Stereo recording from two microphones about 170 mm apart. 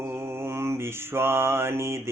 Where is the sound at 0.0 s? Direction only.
15° right (ahead or behind).